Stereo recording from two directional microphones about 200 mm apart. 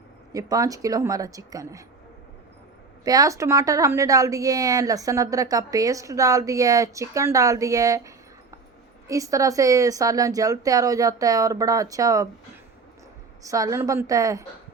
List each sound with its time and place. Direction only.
0.3 s a woman's voice: 15° right (ahead or behind)
3.0 s a woman's voice: 20° right (ahead or behind)
13.4 s a woman's voice: 15° right (ahead or behind)